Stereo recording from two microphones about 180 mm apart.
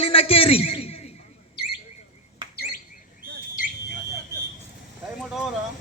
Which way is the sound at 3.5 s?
50° left (ahead or behind).